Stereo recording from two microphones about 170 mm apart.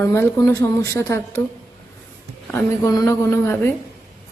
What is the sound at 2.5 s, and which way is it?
Speech, 20° left (ahead or behind).